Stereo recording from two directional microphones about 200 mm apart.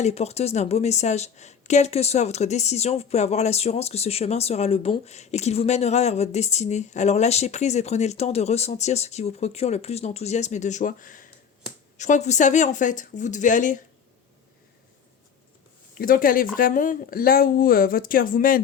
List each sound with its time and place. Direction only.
0.0 s a woman's voice: 30° left (ahead or behind)
16.0 s speech: 45° left (ahead or behind)